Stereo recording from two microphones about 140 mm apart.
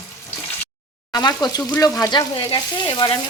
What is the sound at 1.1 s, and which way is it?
Speech, 30° left (ahead or behind).